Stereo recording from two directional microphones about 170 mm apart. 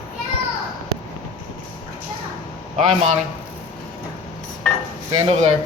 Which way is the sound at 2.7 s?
40° right (ahead or behind).